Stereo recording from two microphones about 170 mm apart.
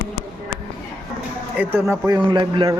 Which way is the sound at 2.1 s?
25° right (ahead or behind).